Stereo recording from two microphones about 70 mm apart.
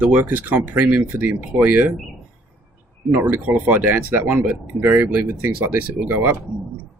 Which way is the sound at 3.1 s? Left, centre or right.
Right.